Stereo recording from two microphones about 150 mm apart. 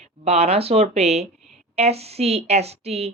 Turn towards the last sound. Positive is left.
turn(degrees=-45)  # may be behind; listen again after turning